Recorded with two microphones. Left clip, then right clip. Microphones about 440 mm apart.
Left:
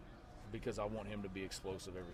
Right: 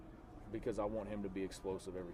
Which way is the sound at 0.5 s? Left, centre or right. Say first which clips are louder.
Right 3 dB; left.